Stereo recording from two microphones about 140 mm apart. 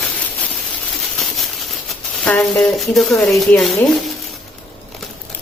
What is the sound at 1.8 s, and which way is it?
Speech, 5° left (ahead or behind).